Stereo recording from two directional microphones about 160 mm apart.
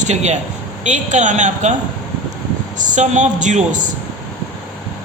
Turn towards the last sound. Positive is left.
turn(degrees=-50)  # may be behind; listen again after turning